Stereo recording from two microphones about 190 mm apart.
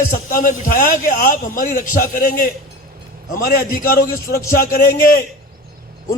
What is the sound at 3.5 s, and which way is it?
A man's voice, 50° left (ahead or behind).